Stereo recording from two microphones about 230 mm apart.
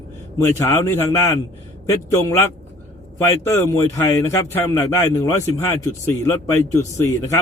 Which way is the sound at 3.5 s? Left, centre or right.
Centre.